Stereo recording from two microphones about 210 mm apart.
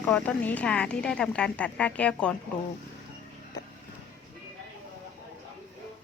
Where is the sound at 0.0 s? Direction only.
5° left (ahead or behind).